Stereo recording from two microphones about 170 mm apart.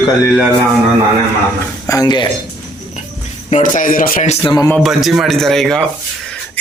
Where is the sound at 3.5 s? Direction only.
50° left (ahead or behind).